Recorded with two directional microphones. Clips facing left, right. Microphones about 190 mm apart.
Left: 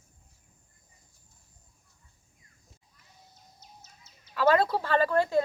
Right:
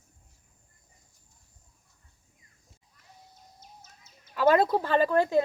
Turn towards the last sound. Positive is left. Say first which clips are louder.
# right 1 dB
turn(degrees=-20)  # may be behind; listen again after turning